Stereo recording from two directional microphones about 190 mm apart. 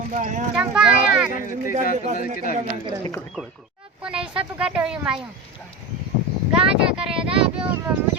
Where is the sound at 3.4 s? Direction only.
10° left (ahead or behind).